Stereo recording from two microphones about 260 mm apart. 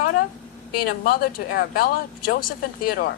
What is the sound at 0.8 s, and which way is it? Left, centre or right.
A woman's voice, left.